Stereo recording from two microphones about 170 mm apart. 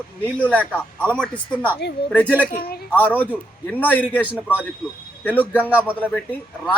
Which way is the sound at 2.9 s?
10° left (ahead or behind).